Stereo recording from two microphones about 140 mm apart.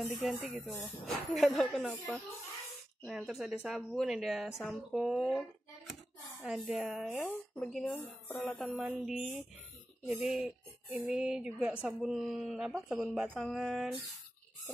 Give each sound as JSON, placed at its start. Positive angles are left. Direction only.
{"t": 0.2, "sound": "speech", "side_deg": 0}
{"t": 0.7, "sound": "speech", "side_deg": 15}
{"t": 1.0, "sound": "speech", "side_deg": 0}
{"t": 6.4, "sound": "speech", "side_deg": -5}
{"t": 7.2, "sound": "speech", "side_deg": 15}
{"t": 7.7, "sound": "speech", "side_deg": 0}